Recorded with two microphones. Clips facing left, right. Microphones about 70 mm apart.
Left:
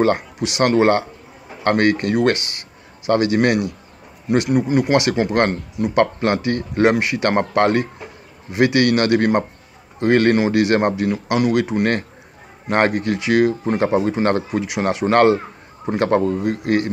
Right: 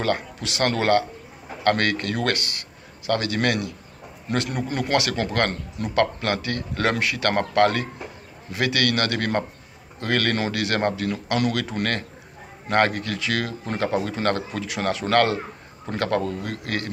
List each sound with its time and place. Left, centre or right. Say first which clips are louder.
0.0 s a man's voice: left 7 dB; left